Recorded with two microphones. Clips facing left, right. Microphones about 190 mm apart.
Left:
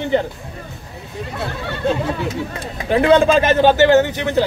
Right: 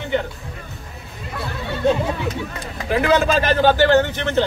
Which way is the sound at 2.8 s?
25° left (ahead or behind).